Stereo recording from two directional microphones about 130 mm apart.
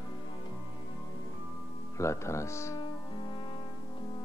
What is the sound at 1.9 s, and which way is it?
Speech, 20° left (ahead or behind).